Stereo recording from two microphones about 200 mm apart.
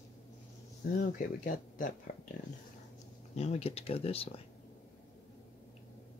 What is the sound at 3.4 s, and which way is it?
Speech, 30° left (ahead or behind).